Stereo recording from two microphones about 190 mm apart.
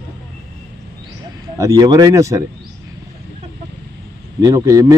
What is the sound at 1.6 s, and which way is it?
Speech, 20° right (ahead or behind).